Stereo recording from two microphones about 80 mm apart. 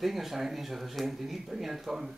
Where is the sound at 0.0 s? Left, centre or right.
Centre.